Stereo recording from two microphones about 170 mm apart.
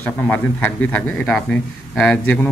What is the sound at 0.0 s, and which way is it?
Speech, 10° left (ahead or behind).